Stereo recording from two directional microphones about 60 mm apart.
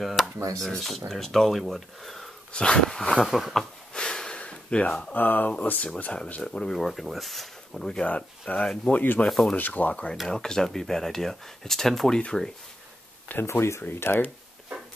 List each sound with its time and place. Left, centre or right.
0.0 s speech: centre
2.5 s speech: centre
3.2 s speech: centre
3.9 s snort: centre
5.1 s speech: left
6.4 s speech: centre
9.6 s speech: left
10.1 s speech: centre
13.3 s speech: left